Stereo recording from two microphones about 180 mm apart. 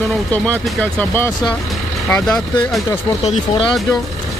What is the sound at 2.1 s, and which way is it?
Vehicle, 5° left (ahead or behind).